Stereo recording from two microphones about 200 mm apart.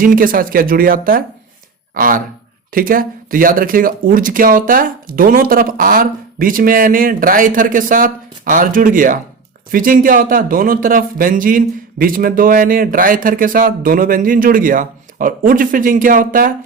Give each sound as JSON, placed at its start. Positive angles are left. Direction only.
{"t": 0.0, "sound": "speech", "side_deg": -45}